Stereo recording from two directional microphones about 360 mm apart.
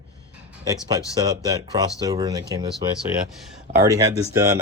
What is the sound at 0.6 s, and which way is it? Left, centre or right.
Speech, centre.